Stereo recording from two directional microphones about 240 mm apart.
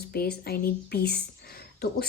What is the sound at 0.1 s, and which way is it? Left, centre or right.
A woman's voice, left.